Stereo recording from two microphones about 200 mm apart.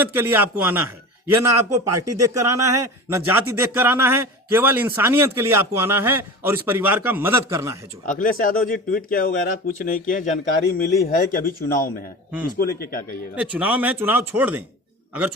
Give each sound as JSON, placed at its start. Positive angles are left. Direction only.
{"t": 0.0, "sound": "speech", "side_deg": -10}
{"t": 8.0, "sound": "speech", "side_deg": 40}
{"t": 13.3, "sound": "speech", "side_deg": -5}